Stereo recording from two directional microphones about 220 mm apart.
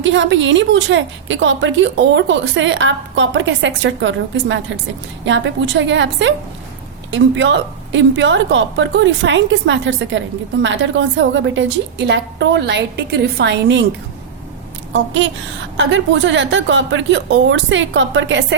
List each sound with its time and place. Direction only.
0.0 s a woman's voice: 55° right (ahead or behind)
14.9 s a woman's voice: 55° right (ahead or behind)